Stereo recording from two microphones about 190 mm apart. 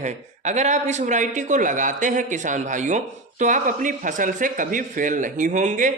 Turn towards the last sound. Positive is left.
turn(degrees=-40)  # may be behind; listen again after turning